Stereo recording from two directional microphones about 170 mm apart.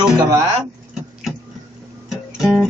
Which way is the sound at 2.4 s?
Centre (ahead or behind).